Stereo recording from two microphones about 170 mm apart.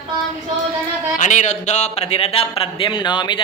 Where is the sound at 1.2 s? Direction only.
45° left (ahead or behind); by 3.4 s 25° left (ahead or behind).